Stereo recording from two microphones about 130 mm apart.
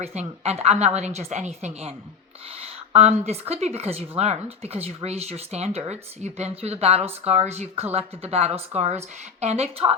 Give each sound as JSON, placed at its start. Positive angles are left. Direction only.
{"t": 0.0, "sound": "a woman's voice", "side_deg": -55}